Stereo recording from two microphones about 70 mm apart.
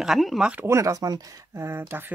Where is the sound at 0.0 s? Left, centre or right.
Centre.